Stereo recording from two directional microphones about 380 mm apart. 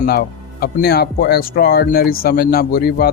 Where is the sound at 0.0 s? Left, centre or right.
Left.